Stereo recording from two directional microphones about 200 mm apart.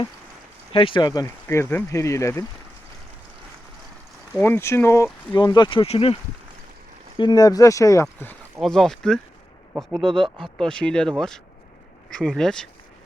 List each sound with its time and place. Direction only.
0.7 s speech: 25° left (ahead or behind)
4.4 s speech: 10° left (ahead or behind); by 6.1 s 30° left (ahead or behind)
7.2 s speech: 20° left (ahead or behind); by 10.1 s 5° right (ahead or behind)
10.1 s speech: 25° right (ahead or behind)
10.3 s speech: centre (ahead or behind)
12.1 s speech: 5° left (ahead or behind)